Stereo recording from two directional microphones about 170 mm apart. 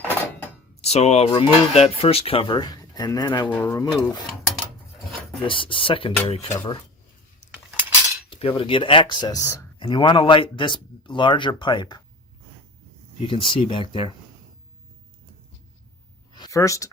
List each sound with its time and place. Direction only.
0.1 s a sound: 10° left (ahead or behind)
0.8 s speech: 40° left (ahead or behind)
3.5 s speech: 15° left (ahead or behind)
5.4 s speech: 30° left (ahead or behind)
8.3 s speech: 30° left (ahead or behind); by 9.6 s 15° left (ahead or behind)
9.7 s speech: 30° left (ahead or behind)
13.1 s speech: 30° left (ahead or behind)
16.3 s a sound: 20° left (ahead or behind)